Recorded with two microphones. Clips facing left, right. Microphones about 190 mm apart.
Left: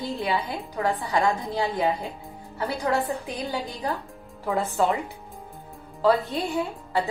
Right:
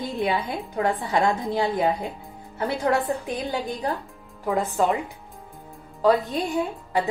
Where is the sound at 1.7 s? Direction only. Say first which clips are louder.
Right 2 dB; 20° right (ahead or behind).